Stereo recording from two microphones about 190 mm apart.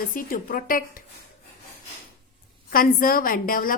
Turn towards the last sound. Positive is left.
turn(degrees=45)  # may be behind; listen again after turning